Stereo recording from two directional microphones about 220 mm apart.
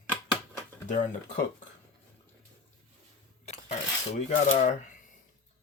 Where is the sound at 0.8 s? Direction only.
35° left (ahead or behind).